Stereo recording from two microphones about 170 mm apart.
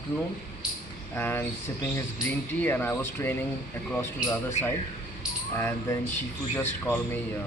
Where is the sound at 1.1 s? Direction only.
10° left (ahead or behind).